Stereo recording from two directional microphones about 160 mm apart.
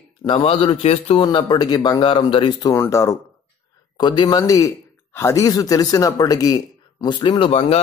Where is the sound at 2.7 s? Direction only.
15° left (ahead or behind).